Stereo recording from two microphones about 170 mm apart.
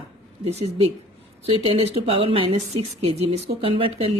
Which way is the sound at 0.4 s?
35° right (ahead or behind).